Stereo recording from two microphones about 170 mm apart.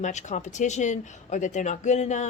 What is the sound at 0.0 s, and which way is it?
Speech, 45° left (ahead or behind).